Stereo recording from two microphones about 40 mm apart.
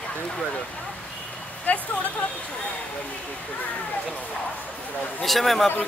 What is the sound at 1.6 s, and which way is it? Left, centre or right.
Speech, left.